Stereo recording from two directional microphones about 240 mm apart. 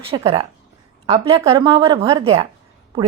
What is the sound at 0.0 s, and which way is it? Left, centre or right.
A woman's voice, right.